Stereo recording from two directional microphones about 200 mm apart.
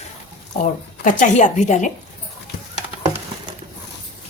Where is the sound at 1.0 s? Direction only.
40° left (ahead or behind).